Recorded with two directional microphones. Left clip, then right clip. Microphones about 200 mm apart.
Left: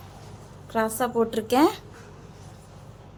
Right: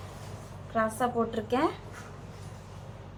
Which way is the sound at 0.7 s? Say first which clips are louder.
Left 3 dB; 60° left (ahead or behind).